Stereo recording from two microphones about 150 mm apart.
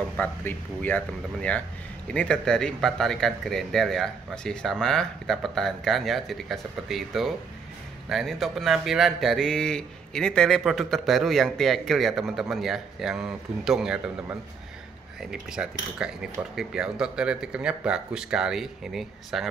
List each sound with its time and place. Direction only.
0.2 s speech: 10° left (ahead or behind)